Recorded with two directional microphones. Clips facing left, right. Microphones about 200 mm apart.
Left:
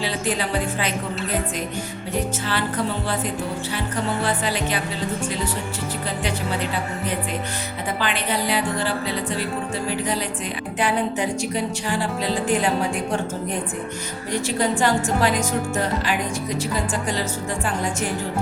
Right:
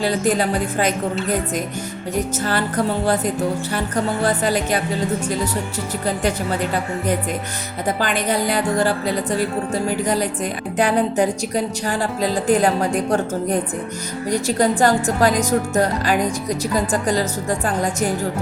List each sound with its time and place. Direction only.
0.0 s a woman's voice: 45° right (ahead or behind)
2.4 s a woman's voice: 45° right (ahead or behind)
7.9 s a woman's voice: 45° right (ahead or behind)
10.8 s speech: 40° right (ahead or behind)